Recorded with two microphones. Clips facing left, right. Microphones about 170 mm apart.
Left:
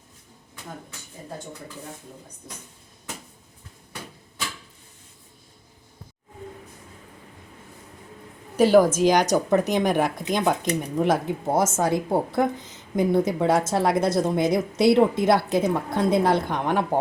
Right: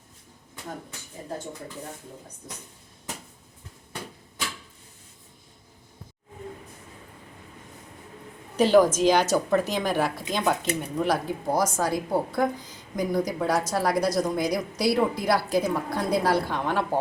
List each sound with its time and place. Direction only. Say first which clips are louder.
8.5 s a woman's voice: left 2 dB; 10° left (ahead or behind)